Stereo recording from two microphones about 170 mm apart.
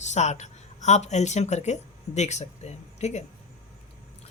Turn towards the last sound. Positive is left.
turn(degrees=40)  # may be behind; listen again after turning